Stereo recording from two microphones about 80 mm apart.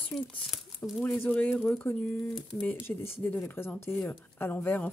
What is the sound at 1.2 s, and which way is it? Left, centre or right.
Speech, left.